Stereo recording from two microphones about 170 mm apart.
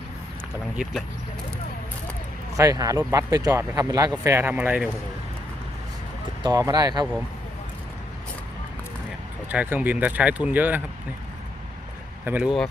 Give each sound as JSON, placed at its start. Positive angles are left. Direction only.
{"t": 2.6, "sound": "speech", "side_deg": -20}
{"t": 6.4, "sound": "speech", "side_deg": -25}
{"t": 9.5, "sound": "speech", "side_deg": -10}
{"t": 12.2, "sound": "speech", "side_deg": -10}